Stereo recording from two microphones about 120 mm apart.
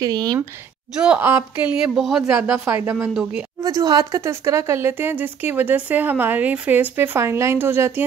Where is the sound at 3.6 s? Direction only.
30° right (ahead or behind).